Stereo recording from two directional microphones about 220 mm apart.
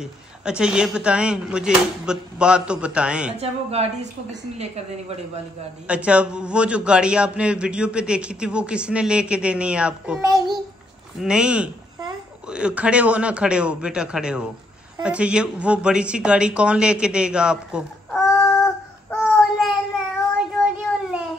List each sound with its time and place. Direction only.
0.0 s a man's voice: 5° right (ahead or behind)
3.3 s a woman's voice: 30° right (ahead or behind)
5.9 s a man's voice: 5° right (ahead or behind)
10.2 s a child's voice: 15° right (ahead or behind)
11.1 s a man's voice: 5° right (ahead or behind)
19.2 s child singing: centre (ahead or behind)
20.3 s a sound: 5° right (ahead or behind)